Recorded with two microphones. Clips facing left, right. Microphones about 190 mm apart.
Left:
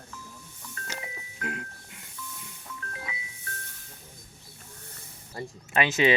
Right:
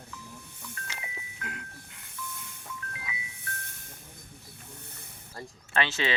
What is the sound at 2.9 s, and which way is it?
Music, 40° left (ahead or behind).